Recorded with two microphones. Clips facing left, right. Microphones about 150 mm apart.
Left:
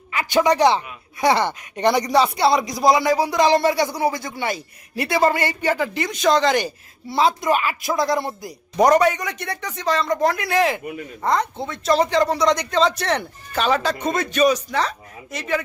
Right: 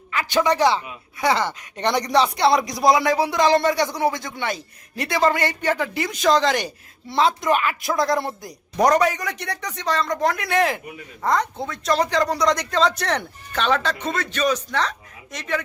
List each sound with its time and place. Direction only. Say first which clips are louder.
0.1 s a man's voice: left 2 dB; 15° left (ahead or behind)